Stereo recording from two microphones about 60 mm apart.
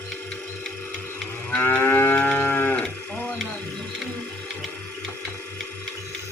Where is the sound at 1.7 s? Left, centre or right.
Left.